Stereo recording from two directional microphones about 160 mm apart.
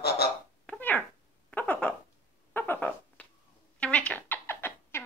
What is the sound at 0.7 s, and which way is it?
Cat, 10° left (ahead or behind).